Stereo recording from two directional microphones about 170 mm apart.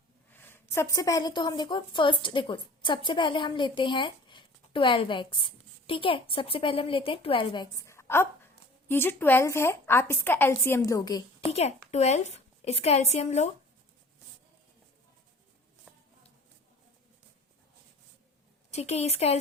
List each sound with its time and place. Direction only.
0.3 s a woman's voice: 15° left (ahead or behind)
11.5 s a woman's voice: 40° left (ahead or behind)
18.7 s a woman's voice: 40° left (ahead or behind)